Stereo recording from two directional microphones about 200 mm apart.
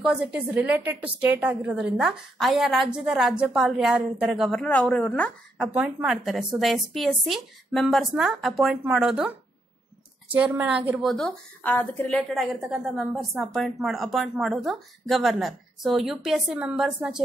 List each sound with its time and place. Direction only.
0.0 s a woman's voice: 5° right (ahead or behind)
5.7 s a woman's voice: 5° right (ahead or behind)
10.3 s a woman's voice: 10° right (ahead or behind)